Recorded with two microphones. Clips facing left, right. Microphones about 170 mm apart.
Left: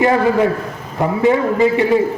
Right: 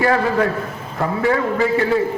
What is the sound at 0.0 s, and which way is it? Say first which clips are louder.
A man's voice: left 3 dB; 20° left (ahead or behind).